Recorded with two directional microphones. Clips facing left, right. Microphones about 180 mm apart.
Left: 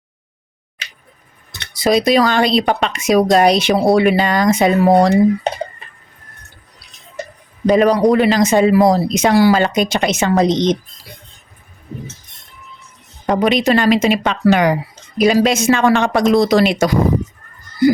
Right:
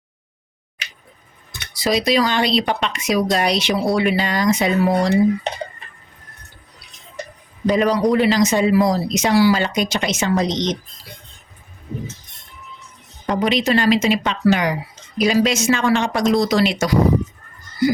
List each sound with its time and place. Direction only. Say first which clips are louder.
1.7 s speech: left 5 dB; 50° left (ahead or behind)
7.7 s speech: left 5 dB; 55° left (ahead or behind)
13.2 s speech: left 4 dB; 60° left (ahead or behind)